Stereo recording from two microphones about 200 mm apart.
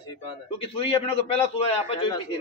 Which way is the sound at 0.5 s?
30° left (ahead or behind).